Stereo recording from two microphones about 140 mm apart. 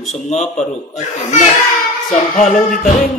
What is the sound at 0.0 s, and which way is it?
Speech, centre (ahead or behind).